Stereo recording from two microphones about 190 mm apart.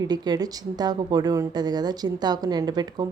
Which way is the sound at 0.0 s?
20° right (ahead or behind).